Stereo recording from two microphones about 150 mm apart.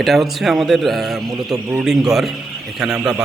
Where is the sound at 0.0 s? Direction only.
Centre (ahead or behind).